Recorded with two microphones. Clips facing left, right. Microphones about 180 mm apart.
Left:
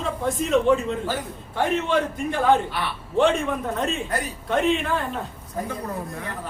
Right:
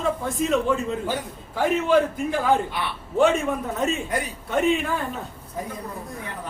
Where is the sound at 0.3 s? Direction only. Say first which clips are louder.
Left 5 dB; centre (ahead or behind).